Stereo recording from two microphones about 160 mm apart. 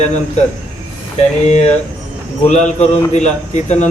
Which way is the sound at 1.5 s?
45° left (ahead or behind).